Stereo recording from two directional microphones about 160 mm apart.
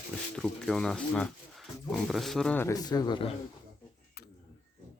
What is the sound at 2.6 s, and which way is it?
Speech, 20° left (ahead or behind).